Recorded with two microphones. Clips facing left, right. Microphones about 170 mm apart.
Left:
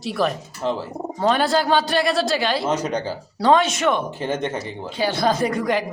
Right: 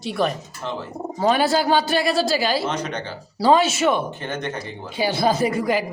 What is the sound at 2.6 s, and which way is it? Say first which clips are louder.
Speech: left 4 dB; 10° left (ahead or behind).